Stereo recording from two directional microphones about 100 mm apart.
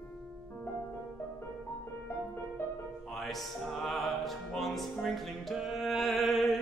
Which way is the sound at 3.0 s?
Centre (ahead or behind).